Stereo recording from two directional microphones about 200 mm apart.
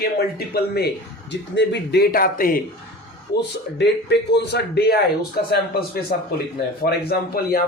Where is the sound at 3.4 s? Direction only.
60° left (ahead or behind).